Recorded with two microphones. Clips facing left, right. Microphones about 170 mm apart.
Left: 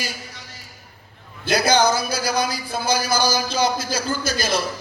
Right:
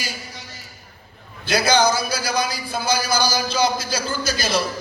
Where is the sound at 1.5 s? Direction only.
50° left (ahead or behind).